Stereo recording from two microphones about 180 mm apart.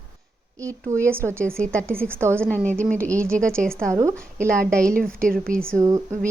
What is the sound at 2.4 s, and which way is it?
A woman's voice, 5° left (ahead or behind).